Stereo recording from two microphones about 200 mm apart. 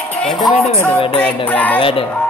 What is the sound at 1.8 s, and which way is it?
Speech, 25° left (ahead or behind).